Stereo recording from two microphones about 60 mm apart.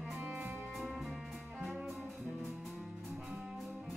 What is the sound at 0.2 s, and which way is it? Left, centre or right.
Music, right.